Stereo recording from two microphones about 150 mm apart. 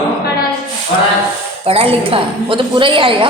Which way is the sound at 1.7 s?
40° right (ahead or behind).